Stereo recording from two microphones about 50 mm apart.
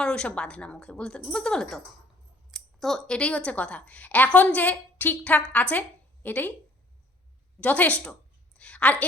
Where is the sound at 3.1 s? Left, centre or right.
Left.